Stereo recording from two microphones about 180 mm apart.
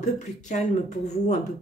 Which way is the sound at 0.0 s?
40° left (ahead or behind).